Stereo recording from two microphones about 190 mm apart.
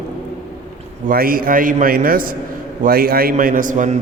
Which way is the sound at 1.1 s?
50° right (ahead or behind).